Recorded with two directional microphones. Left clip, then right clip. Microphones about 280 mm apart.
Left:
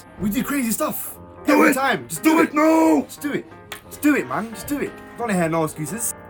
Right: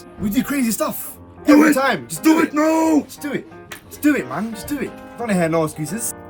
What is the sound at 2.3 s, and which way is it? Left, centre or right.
Speech, left.